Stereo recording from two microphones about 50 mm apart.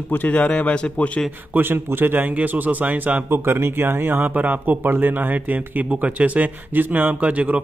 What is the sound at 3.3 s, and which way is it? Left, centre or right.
Speech, right.